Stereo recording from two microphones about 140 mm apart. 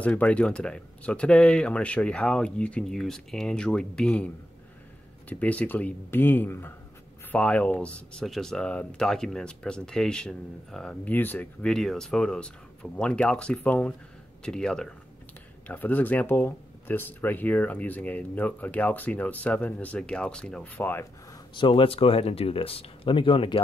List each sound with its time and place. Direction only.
0.0 s speech: 10° left (ahead or behind)
5.3 s speech: 10° left (ahead or behind)
21.5 s speech: 35° left (ahead or behind)